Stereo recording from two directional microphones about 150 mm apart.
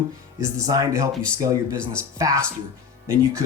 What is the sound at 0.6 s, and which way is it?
Speech, 25° right (ahead or behind).